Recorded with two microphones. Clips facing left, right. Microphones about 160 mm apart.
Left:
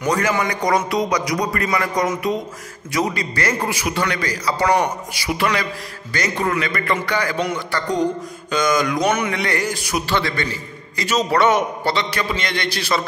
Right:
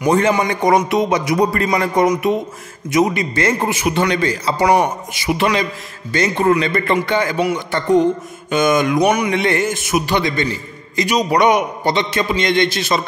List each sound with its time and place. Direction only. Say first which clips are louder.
0.1 s a man's voice: right 4 dB; 20° right (ahead or behind)
4.6 s a man's voice: right 3 dB; 15° right (ahead or behind)
7.3 s a man's voice: right 4 dB; 10° right (ahead or behind)
7.7 s a man's voice: right 7 dB; 20° right (ahead or behind)
9.0 s a man's voice: right 4 dB; 15° right (ahead or behind)
9.4 s a man's voice: right 5 dB; 25° right (ahead or behind)